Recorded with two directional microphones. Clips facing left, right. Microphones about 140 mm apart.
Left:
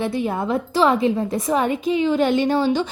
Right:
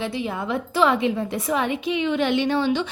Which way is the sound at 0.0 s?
50° left (ahead or behind).